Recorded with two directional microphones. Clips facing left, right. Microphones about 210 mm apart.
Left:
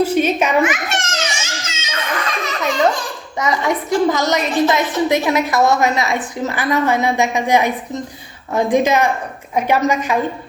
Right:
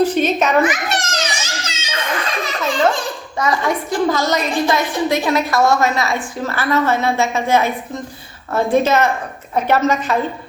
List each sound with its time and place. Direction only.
0.0 s a sound: 10° left (ahead or behind)
0.6 s children playing: 35° right (ahead or behind)
3.3 s a woman's voice: 20° left (ahead or behind)